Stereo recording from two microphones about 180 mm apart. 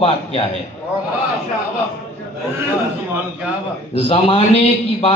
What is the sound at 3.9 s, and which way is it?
Speech, 30° left (ahead or behind).